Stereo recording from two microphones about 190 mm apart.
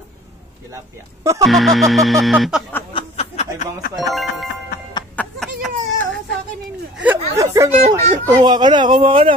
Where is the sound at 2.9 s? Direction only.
30° left (ahead or behind).